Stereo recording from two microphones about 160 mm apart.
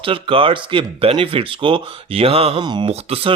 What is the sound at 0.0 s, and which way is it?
Speech, 35° right (ahead or behind).